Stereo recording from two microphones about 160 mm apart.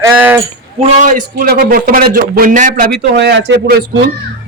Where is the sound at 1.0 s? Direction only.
60° right (ahead or behind).